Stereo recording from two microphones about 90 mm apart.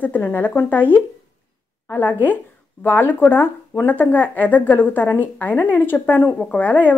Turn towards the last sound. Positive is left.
turn(degrees=20)  # may be behind; listen again after turning